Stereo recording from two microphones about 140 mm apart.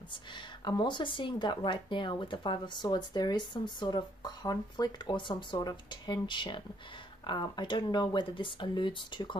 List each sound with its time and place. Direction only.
0.7 s speech: 35° left (ahead or behind)